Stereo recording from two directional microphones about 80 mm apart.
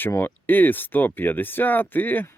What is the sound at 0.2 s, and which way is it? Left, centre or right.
Speech, left.